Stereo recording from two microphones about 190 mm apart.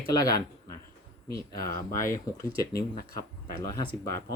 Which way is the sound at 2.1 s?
15° left (ahead or behind).